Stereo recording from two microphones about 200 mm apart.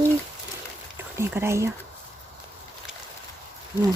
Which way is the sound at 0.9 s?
10° right (ahead or behind).